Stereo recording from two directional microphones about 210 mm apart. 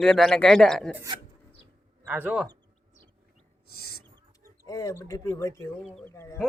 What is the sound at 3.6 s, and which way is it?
Owl, 45° left (ahead or behind).